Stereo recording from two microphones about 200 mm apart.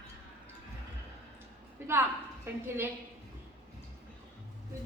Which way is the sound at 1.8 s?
10° right (ahead or behind).